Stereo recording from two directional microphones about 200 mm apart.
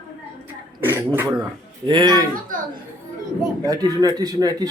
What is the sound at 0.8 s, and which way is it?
Speech, 10° right (ahead or behind).